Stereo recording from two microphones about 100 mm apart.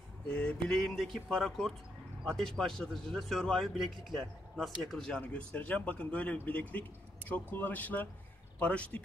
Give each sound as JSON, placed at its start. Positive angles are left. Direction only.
{"t": 0.3, "sound": "a man's voice", "side_deg": 10}